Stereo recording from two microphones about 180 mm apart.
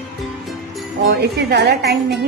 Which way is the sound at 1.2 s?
65° right (ahead or behind).